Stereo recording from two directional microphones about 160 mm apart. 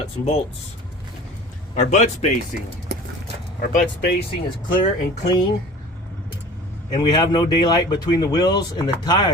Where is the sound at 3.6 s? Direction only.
55° left (ahead or behind).